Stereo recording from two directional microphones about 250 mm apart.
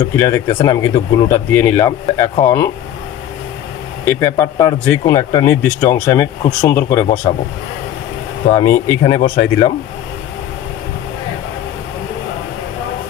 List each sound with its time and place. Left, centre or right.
0.0 s speech: centre
4.1 s speech: centre
8.5 s speech: centre